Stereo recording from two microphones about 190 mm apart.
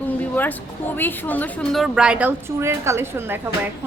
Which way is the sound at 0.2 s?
10° left (ahead or behind).